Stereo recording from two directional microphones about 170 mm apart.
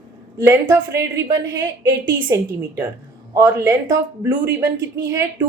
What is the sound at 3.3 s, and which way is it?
A woman's voice, 20° right (ahead or behind).